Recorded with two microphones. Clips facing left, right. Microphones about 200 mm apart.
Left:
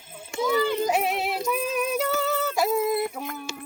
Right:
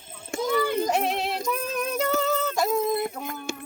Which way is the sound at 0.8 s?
5° left (ahead or behind).